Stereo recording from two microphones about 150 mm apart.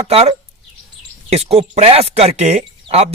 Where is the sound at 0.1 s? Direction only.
40° right (ahead or behind).